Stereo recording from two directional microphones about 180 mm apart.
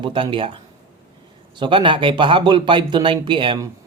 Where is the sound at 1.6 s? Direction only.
25° right (ahead or behind).